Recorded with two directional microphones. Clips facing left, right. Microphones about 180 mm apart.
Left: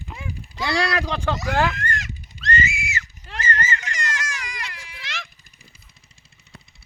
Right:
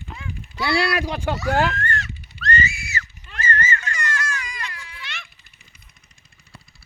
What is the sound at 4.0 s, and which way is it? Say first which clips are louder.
Baby cry: right 2 dB; 90° left.